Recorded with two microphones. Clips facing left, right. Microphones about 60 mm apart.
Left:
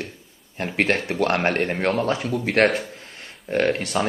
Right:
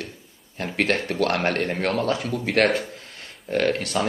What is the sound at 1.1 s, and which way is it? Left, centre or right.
Speech, centre.